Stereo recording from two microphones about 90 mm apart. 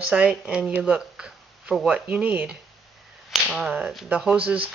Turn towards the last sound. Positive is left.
turn(degrees=-15)  # may be behind; listen again after turning